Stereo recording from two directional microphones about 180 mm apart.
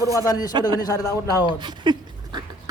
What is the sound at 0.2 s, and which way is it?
A man's voice, 20° left (ahead or behind).